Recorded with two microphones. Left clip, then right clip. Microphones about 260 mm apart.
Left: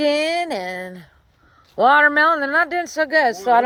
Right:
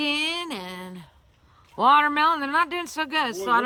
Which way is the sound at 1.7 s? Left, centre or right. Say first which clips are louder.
Left 5 dB; centre.